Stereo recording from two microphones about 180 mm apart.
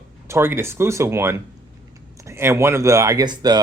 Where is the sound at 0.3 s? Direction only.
15° right (ahead or behind).